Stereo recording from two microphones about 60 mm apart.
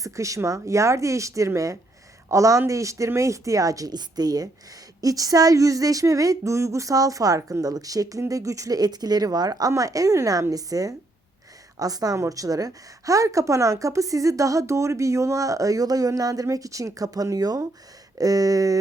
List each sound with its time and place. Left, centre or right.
0.0 s a woman's voice: right
8.3 s a woman's voice: right
12.1 s a woman's voice: right